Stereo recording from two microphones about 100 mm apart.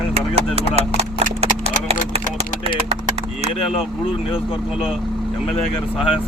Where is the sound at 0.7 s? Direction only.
90° right.